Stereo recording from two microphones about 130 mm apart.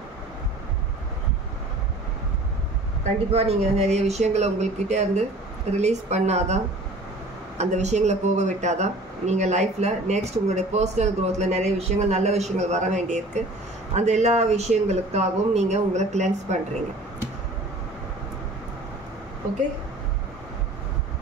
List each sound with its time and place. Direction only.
3.3 s speech: 50° right (ahead or behind)